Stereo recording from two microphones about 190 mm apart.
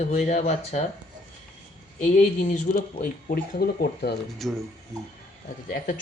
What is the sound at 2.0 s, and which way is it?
Speech, 40° left (ahead or behind).